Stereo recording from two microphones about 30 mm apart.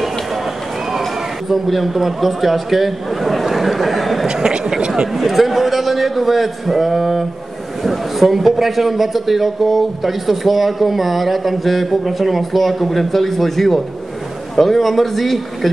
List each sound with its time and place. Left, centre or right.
1.5 s a man's voice: centre
4.3 s speech: right
5.1 s a man's voice: centre